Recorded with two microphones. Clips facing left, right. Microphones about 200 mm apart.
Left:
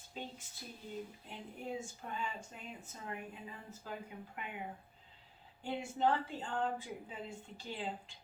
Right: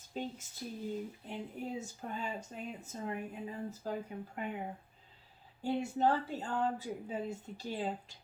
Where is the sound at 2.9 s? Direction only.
40° right (ahead or behind).